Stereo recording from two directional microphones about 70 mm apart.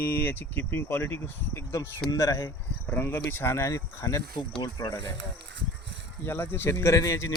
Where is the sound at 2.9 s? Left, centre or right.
Left.